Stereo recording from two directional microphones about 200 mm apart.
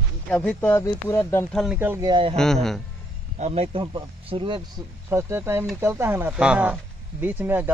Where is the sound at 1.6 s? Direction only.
5° right (ahead or behind).